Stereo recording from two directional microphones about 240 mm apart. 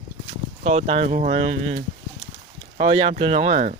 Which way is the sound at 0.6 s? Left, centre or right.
Right.